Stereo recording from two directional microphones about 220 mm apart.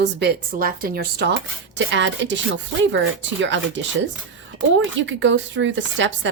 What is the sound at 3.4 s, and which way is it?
Speech, 55° right (ahead or behind).